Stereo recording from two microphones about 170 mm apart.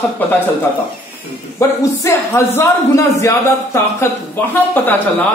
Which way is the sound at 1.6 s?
15° left (ahead or behind).